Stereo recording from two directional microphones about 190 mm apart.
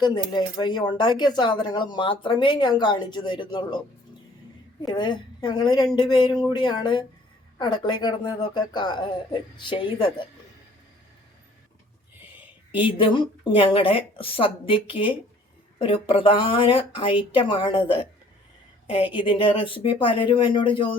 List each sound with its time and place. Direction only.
0.0 s speech: 25° left (ahead or behind)
4.8 s speech: 25° left (ahead or behind)
13.0 s speech: 25° left (ahead or behind)
19.1 s speech: 25° left (ahead or behind)